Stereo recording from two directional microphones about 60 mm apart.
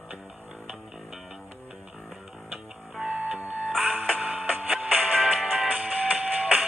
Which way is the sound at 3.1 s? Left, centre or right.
Right.